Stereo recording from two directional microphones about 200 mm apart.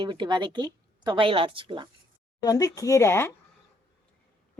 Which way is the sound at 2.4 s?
20° left (ahead or behind).